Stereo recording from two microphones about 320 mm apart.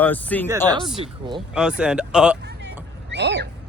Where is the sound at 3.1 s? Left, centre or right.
Right.